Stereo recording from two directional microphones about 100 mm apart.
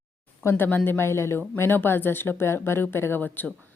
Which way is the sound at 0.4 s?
20° left (ahead or behind).